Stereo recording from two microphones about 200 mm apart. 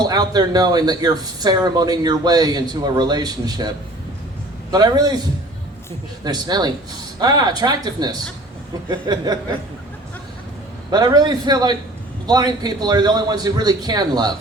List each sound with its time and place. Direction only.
0.0 s speech: 20° right (ahead or behind)
4.7 s speech: 20° right (ahead or behind)
10.9 s speech: 20° right (ahead or behind)